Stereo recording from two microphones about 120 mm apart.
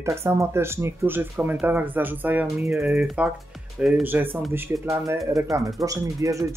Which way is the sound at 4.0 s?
15° right (ahead or behind).